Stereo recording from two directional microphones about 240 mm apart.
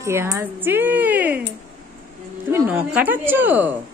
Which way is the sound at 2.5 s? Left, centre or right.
Centre.